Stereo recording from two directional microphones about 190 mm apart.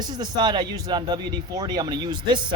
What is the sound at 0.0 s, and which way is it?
Speech, 20° right (ahead or behind).